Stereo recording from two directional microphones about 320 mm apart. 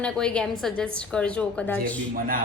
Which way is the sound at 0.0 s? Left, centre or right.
Centre.